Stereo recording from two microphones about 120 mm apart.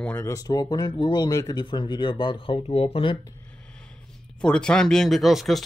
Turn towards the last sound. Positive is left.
turn(degrees=0)  # may be behind; listen again after turning